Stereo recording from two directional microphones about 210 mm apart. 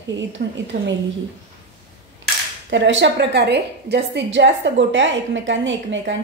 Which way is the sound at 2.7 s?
60° right (ahead or behind).